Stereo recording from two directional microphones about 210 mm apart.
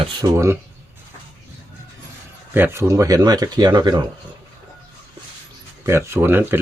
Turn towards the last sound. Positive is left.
turn(degrees=-10)  # may be behind; listen again after turning